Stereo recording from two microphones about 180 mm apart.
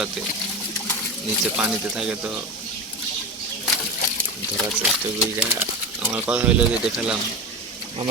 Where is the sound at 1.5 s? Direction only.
5° right (ahead or behind).